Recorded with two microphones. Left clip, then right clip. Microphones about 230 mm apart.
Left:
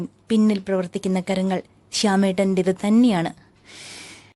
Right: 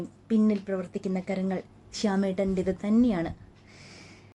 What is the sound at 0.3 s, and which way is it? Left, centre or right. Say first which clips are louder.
A woman's voice: left 6 dB; left.